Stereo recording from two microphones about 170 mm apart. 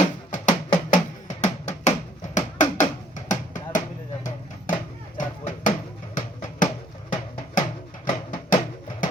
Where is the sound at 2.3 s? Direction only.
45° left (ahead or behind).